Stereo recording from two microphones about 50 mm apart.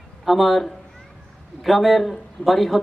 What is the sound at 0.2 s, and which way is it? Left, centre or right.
Music, centre.